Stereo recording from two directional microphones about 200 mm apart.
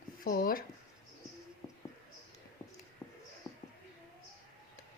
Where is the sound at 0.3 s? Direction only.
45° left (ahead or behind).